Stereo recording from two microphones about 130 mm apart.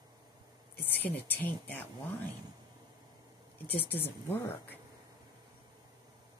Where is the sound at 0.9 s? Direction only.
15° left (ahead or behind).